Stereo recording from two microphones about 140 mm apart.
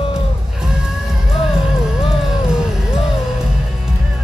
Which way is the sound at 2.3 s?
5° right (ahead or behind).